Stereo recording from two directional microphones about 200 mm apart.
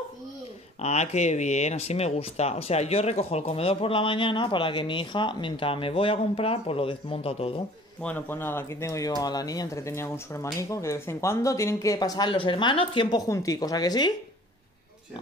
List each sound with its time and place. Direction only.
0.7 s speech: 35° left (ahead or behind)
8.0 s speech: 10° left (ahead or behind)